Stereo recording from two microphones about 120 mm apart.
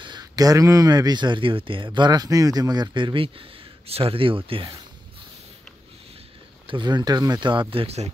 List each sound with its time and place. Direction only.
0.0 s speech: 35° right (ahead or behind)
6.7 s speech: 40° right (ahead or behind)
7.7 s speech: 55° right (ahead or behind)